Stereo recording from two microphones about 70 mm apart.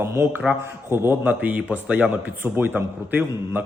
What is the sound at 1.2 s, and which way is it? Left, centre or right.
Speech, right.